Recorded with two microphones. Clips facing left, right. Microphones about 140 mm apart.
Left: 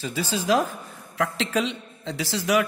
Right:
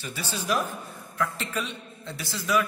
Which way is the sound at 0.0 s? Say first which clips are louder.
Left 7 dB; 90° left.